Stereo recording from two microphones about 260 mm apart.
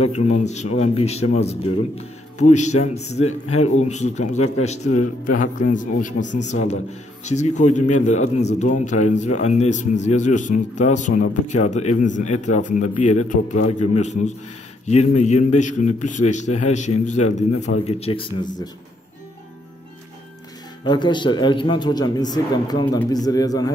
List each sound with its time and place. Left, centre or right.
0.0 s a man's voice: left
20.8 s a man's voice: centre